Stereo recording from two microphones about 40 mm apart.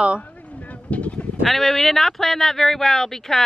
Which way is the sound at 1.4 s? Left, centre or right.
Centre.